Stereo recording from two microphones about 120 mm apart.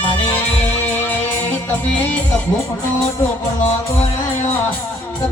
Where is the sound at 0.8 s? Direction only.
15° left (ahead or behind).